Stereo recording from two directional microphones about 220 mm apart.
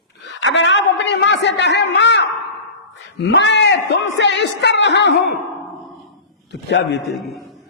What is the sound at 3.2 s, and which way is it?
Speech, 55° left (ahead or behind).